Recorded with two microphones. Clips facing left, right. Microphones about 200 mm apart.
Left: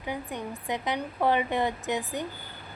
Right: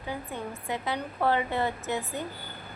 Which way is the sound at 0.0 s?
15° left (ahead or behind).